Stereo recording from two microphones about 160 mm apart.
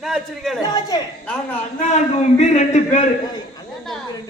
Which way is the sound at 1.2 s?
5° left (ahead or behind).